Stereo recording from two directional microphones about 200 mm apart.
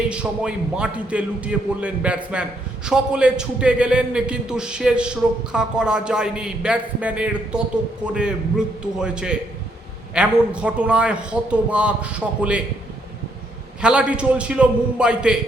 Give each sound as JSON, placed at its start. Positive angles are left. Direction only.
{"t": 0.1, "sound": "a man's voice", "side_deg": -5}
{"t": 13.8, "sound": "a man's voice", "side_deg": -5}